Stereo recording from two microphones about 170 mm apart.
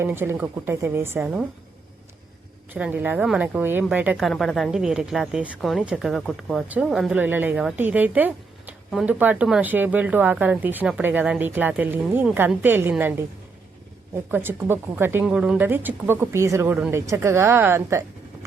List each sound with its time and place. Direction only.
0.0 s speech: 15° right (ahead or behind)
2.7 s speech: 10° right (ahead or behind)
14.3 s speech: 10° right (ahead or behind)